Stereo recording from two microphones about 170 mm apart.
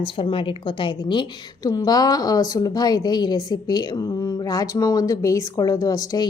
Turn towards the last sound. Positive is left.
turn(degrees=25)  # may be behind; listen again after turning